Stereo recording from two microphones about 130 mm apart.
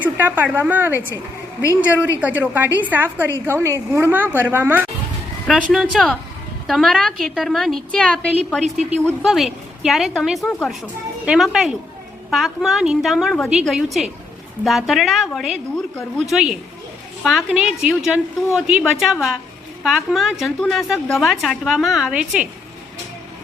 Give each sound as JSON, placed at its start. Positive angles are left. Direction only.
{"t": 0.0, "sound": "a woman's voice", "side_deg": -15}
{"t": 5.5, "sound": "a woman's voice", "side_deg": 0}